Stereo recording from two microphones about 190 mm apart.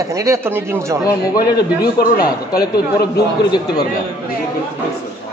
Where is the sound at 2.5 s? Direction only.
55° left (ahead or behind).